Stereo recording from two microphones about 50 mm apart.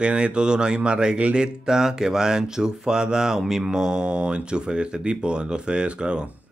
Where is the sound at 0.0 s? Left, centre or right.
Right.